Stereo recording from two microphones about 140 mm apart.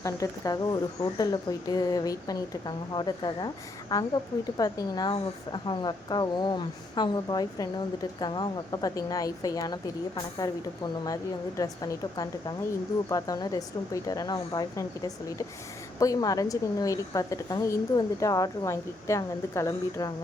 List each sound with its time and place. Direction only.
0.0 s speech: 25° left (ahead or behind)